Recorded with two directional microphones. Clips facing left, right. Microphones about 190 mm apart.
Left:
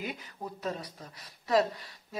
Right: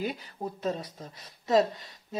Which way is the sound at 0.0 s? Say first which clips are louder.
Right 5 dB; 35° right (ahead or behind).